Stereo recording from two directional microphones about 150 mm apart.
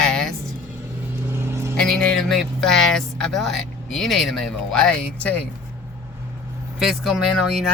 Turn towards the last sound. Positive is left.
turn(degrees=0)  # may be behind; listen again after turning